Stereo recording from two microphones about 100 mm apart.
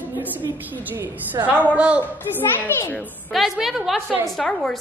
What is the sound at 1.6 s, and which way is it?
Speech, 15° right (ahead or behind).